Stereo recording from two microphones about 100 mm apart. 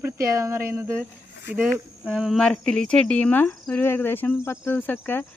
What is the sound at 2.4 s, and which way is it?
Speech, 5° left (ahead or behind).